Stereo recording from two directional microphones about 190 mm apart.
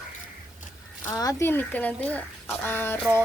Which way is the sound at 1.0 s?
20° left (ahead or behind).